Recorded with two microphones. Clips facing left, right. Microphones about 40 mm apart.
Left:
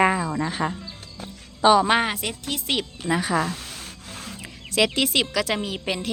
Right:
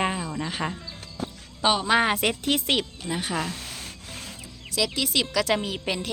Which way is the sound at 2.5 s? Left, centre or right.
Right.